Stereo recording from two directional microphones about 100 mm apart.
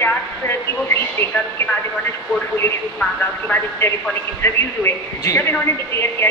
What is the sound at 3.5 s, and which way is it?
A woman's voice, 25° left (ahead or behind).